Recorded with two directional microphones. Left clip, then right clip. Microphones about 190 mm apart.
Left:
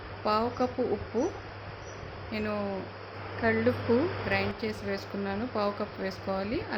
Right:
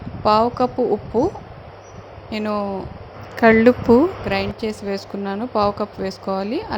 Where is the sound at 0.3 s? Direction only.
35° right (ahead or behind).